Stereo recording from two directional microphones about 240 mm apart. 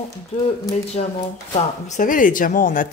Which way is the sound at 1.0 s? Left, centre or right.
Left.